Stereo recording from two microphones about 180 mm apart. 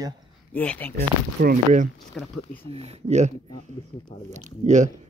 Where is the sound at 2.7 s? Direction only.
35° right (ahead or behind).